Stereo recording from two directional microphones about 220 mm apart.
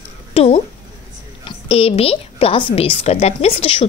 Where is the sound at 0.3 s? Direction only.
30° left (ahead or behind).